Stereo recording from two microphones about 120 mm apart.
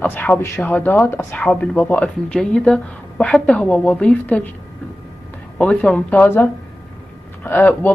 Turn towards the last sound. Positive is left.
turn(degrees=15)  # may be behind; listen again after turning